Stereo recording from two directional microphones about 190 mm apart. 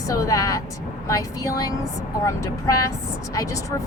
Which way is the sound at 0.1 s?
15° left (ahead or behind).